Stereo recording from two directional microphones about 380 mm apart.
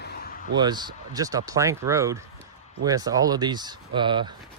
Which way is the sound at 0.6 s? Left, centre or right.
Centre.